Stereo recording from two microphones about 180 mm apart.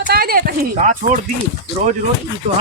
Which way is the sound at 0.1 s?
55° right (ahead or behind).